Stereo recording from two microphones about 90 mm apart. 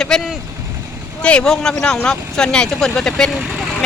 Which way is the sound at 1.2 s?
10° left (ahead or behind).